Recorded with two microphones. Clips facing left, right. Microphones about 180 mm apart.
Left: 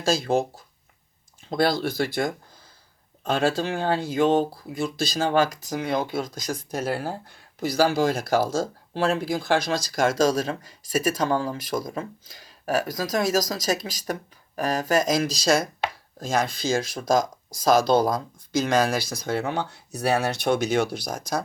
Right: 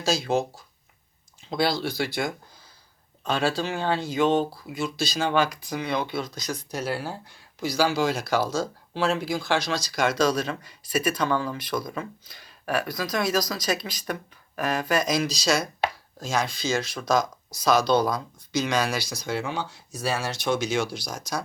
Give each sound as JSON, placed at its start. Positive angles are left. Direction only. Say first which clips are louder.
{"t": 0.0, "sound": "speech", "louder": "left 2 dB", "side_deg": 50}